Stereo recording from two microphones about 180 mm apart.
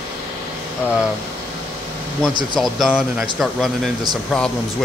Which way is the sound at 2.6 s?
Centre (ahead or behind).